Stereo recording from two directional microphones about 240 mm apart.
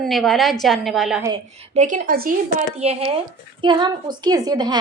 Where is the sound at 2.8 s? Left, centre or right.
Right.